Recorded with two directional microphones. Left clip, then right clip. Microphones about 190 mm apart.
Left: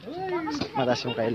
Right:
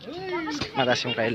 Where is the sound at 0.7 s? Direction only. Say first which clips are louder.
Right 3 dB; centre (ahead or behind).